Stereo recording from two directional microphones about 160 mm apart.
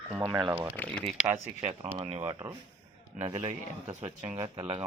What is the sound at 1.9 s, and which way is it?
Speech, 35° right (ahead or behind).